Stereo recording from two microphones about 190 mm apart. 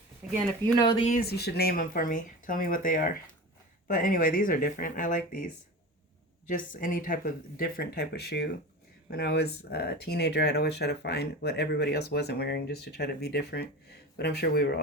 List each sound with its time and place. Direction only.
1.2 s speech: 55° left (ahead or behind)
6.5 s speech: 45° left (ahead or behind)